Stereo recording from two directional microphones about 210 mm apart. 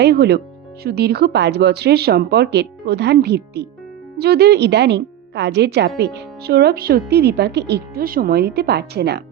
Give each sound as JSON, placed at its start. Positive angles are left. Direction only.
{"t": 0.0, "sound": "speech", "side_deg": -50}